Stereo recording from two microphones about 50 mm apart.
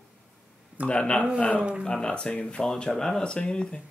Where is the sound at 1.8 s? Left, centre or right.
Centre.